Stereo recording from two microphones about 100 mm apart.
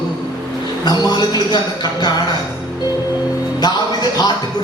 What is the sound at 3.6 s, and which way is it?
Music, 45° left (ahead or behind).